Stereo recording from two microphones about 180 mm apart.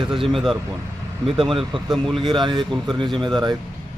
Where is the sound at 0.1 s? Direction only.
Centre (ahead or behind).